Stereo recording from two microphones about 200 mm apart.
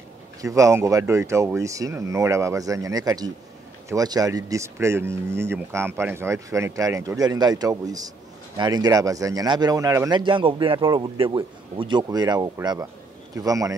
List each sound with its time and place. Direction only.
0.4 s a man's voice: 15° right (ahead or behind)